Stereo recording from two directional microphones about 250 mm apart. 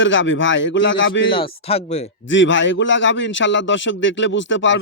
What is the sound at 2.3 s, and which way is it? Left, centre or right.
Speech, left.